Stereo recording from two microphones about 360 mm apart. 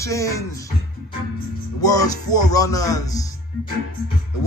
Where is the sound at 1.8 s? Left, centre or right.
Centre.